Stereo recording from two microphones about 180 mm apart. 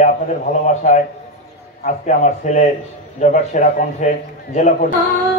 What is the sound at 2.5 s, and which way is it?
A man's voice, 40° left (ahead or behind).